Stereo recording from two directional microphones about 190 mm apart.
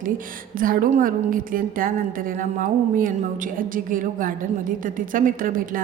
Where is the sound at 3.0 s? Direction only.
45° right (ahead or behind).